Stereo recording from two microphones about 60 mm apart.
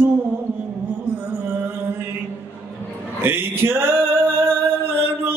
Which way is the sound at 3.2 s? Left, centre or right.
Right.